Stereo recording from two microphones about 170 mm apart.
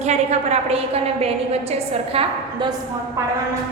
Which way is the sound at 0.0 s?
40° right (ahead or behind).